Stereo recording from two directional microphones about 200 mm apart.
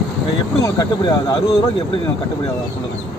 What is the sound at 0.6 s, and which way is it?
Speech, 20° left (ahead or behind).